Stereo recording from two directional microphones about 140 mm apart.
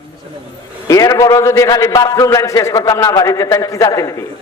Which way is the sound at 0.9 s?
25° left (ahead or behind).